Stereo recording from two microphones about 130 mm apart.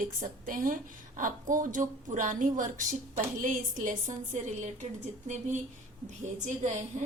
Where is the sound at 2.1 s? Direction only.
75° right (ahead or behind).